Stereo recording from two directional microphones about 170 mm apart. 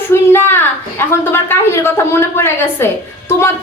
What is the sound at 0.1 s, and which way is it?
A woman's voice, 15° left (ahead or behind).